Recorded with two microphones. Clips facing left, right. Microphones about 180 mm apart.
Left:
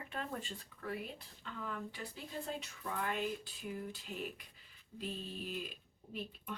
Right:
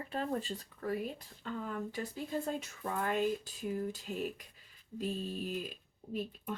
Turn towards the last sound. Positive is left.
turn(degrees=-45)  # may be behind; listen again after turning